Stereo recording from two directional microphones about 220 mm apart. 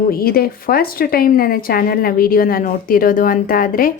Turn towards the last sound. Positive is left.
turn(degrees=40)  # may be behind; listen again after turning